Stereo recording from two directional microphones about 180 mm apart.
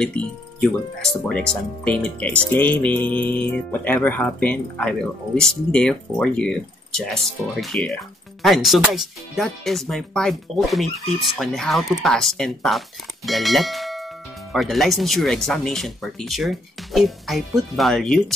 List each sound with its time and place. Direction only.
0.0 s speech: 5° left (ahead or behind)